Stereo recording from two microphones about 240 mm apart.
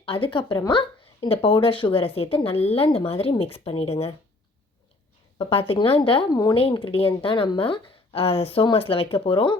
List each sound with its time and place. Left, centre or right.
0.0 s speech: left
5.4 s speech: left